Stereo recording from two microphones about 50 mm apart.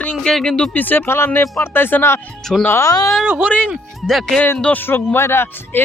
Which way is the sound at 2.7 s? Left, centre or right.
Left.